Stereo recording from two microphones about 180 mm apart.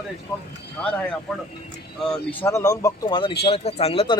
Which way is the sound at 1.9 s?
5° left (ahead or behind).